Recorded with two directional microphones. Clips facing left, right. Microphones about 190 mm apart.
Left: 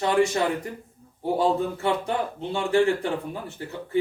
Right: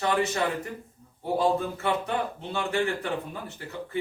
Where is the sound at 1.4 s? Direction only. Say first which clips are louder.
Left 2 dB; 30° left (ahead or behind).